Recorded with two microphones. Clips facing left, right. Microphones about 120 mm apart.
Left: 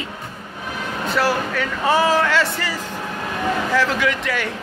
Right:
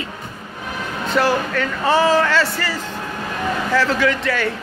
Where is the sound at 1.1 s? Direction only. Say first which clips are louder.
Right 3 dB; 5° left (ahead or behind).